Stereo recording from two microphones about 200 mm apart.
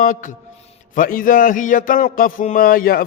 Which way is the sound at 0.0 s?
40° left (ahead or behind).